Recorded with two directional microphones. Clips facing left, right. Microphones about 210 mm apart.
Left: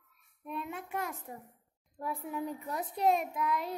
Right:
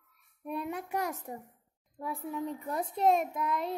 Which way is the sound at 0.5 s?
Centre (ahead or behind).